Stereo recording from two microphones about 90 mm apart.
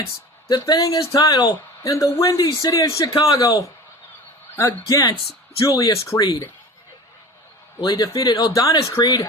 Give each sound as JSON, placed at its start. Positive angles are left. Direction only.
{"t": 0.5, "sound": "speech", "side_deg": 45}
{"t": 7.9, "sound": "speech", "side_deg": 50}